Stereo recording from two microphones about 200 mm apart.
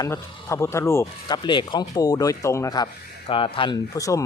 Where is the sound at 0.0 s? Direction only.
15° left (ahead or behind).